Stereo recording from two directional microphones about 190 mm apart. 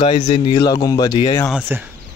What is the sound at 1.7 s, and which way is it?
Speech, 10° right (ahead or behind).